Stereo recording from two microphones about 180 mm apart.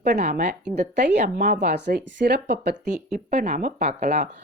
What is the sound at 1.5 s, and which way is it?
Speech, 75° right (ahead or behind).